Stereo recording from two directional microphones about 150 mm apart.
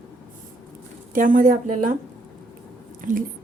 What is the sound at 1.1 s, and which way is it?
Speech, 60° right (ahead or behind).